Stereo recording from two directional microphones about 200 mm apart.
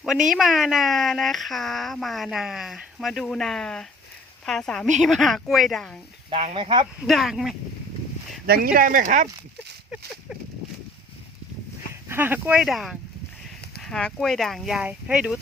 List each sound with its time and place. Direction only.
0.3 s speech: centre (ahead or behind)
6.3 s speech: 30° right (ahead or behind)
7.0 s speech: centre (ahead or behind)
8.4 s speech: 50° right (ahead or behind)
12.0 s speech: 10° right (ahead or behind)